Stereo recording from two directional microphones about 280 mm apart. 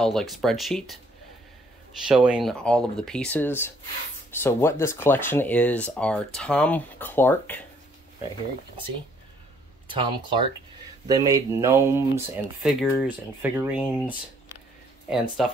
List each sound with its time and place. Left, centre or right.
0.0 s speech: centre
2.0 s speech: centre
9.9 s speech: centre